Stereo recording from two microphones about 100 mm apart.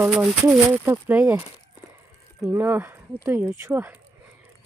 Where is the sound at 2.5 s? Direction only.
20° right (ahead or behind).